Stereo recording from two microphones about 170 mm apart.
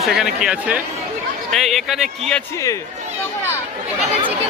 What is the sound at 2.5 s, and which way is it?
Speech, 20° left (ahead or behind).